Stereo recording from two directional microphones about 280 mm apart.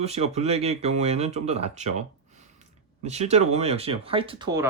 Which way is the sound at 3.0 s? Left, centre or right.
Right.